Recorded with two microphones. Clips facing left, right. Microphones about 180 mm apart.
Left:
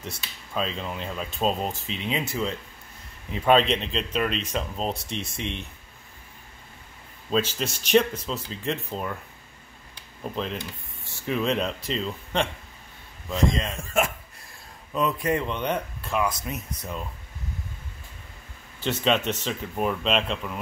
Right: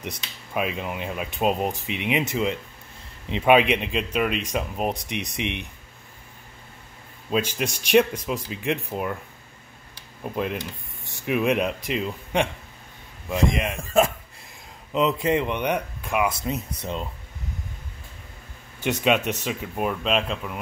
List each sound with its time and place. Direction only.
0.0 s speech: 15° right (ahead or behind)
7.2 s speech: 10° right (ahead or behind)
10.2 s speech: 10° right (ahead or behind)
14.9 s speech: 20° right (ahead or behind)
16.3 s speech: 25° right (ahead or behind)
18.8 s speech: 15° right (ahead or behind)